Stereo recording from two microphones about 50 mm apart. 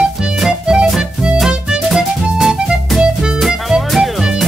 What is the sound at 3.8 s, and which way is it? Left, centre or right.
Music, centre.